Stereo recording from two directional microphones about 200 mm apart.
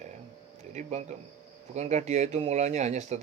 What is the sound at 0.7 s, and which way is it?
Speech, 35° right (ahead or behind).